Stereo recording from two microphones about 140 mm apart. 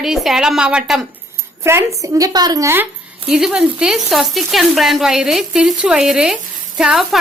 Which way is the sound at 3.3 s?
5° right (ahead or behind).